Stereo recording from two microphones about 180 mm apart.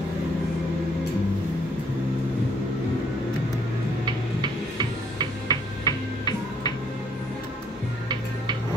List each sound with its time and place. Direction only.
4.0 s tick-tock: 25° right (ahead or behind)
5.5 s music: 20° left (ahead or behind)